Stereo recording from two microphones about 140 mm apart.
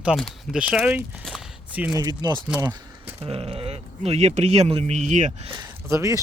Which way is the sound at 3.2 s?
40° right (ahead or behind).